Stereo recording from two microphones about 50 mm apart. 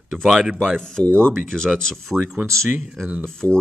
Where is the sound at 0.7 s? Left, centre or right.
Centre.